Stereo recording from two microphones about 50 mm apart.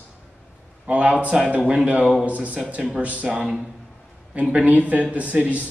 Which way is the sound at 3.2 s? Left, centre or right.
Centre.